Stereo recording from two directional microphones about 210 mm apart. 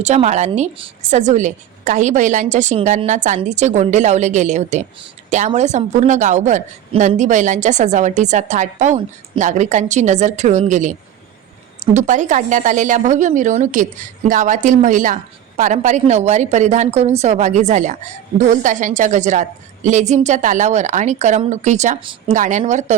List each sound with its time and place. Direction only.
0.0 s a woman's voice: 35° right (ahead or behind)
11.9 s a woman's voice: 35° right (ahead or behind)